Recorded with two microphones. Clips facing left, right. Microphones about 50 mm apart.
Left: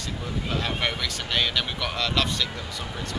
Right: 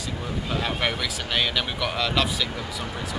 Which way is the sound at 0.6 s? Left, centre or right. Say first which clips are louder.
Right 2 dB; centre.